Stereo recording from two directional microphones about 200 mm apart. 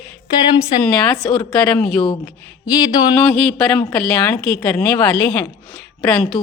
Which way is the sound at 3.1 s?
5° left (ahead or behind).